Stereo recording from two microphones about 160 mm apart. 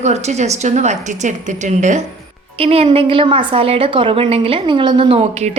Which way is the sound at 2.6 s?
35° right (ahead or behind).